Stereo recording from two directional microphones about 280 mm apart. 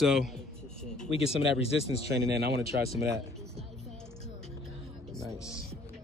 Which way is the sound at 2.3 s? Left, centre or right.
Right.